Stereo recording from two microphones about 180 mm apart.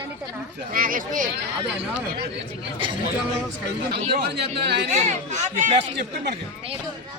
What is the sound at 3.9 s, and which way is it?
Speech, 65° right (ahead or behind).